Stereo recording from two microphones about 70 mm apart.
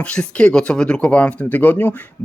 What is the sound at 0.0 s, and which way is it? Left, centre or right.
Speech, centre.